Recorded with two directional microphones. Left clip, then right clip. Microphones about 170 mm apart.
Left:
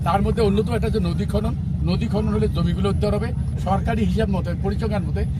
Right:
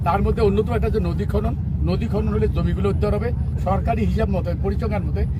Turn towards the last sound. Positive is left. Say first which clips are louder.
# even
turn(degrees=0)  # may be behind; listen again after turning